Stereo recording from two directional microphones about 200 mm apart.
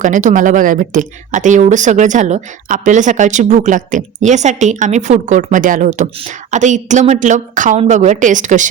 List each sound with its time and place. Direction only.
0.0 s a woman's voice: 40° right (ahead or behind)